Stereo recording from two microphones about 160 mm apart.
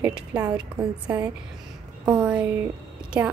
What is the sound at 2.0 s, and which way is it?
A woman's voice, 5° right (ahead or behind).